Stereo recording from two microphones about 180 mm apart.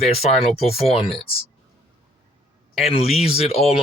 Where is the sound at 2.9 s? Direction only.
35° left (ahead or behind).